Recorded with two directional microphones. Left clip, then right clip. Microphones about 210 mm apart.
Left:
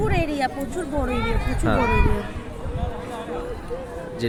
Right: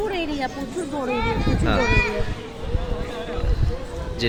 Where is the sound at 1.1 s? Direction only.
60° left (ahead or behind).